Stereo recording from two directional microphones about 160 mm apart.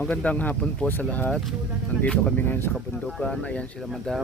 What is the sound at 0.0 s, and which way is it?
Speech, 5° left (ahead or behind).